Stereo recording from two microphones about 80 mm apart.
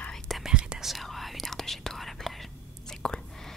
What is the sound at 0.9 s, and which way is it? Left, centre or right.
Whispering, centre.